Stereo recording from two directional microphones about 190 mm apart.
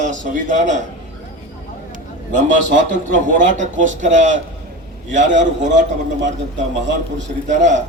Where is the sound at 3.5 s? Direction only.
40° right (ahead or behind).